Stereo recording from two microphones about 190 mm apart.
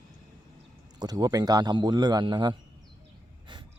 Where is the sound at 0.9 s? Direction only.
20° right (ahead or behind).